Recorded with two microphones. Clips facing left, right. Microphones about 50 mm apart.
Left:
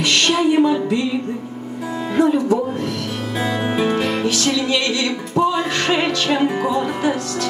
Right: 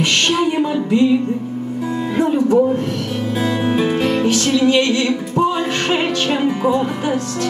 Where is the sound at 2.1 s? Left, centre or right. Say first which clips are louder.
Right 1 dB; right.